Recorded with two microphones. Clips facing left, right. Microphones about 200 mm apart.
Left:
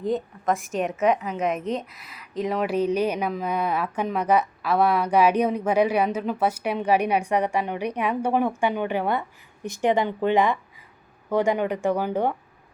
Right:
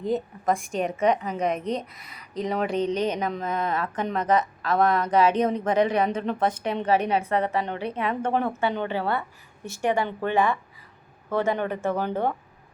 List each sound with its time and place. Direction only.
0.0 s a woman's voice: centre (ahead or behind)